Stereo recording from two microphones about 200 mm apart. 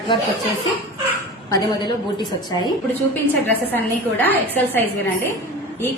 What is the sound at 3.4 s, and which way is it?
A woman's voice, 10° left (ahead or behind).